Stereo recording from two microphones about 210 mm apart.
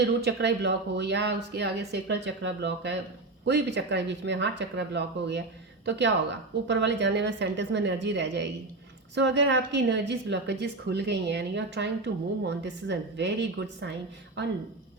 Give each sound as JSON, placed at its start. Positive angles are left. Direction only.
{"t": 0.3, "sound": "a woman's voice", "side_deg": -55}